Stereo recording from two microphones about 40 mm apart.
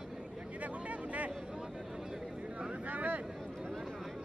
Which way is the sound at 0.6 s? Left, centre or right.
Right.